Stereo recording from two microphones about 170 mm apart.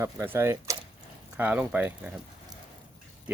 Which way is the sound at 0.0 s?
15° right (ahead or behind).